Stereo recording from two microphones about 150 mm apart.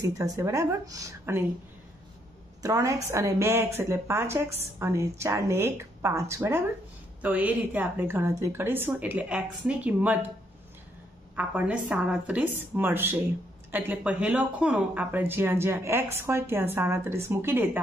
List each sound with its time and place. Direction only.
0.2 s speech: 20° right (ahead or behind)
2.6 s speech: 20° right (ahead or behind)
11.3 s speech: 10° right (ahead or behind)